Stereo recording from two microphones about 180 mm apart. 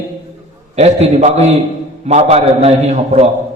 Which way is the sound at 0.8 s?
40° right (ahead or behind).